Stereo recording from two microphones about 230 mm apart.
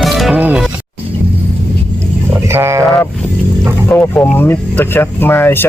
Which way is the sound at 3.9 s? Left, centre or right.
Centre.